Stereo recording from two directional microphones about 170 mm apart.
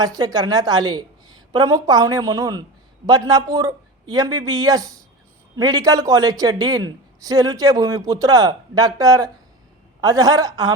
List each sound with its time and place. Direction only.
0.0 s a man's voice: 20° right (ahead or behind)